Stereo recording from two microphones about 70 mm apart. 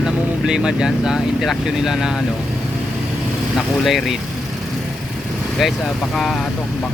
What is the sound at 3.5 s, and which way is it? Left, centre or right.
Speech, centre.